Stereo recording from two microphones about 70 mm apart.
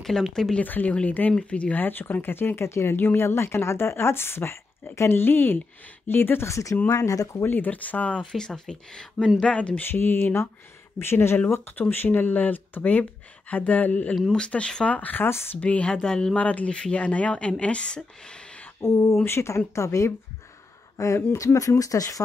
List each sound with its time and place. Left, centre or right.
0.0 s speech: centre
0.7 s speech: left
7.4 s speech: left
8.2 s speech: centre
9.8 s speech: left
14.1 s speech: centre; by 15.6 s left
15.6 s speech: centre
18.8 s speech: left